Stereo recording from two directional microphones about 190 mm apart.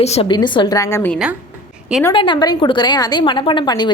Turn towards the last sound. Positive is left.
turn(degrees=25)  # may be behind; listen again after turning